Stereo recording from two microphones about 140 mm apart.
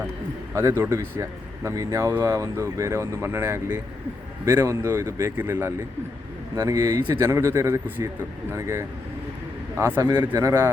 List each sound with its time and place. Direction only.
0.5 s a man's voice: 20° right (ahead or behind)